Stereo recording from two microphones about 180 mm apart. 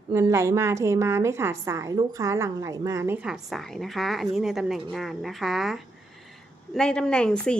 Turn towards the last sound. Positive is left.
turn(degrees=5)  # may be behind; listen again after turning